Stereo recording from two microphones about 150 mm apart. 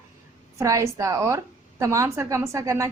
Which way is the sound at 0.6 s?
20° right (ahead or behind).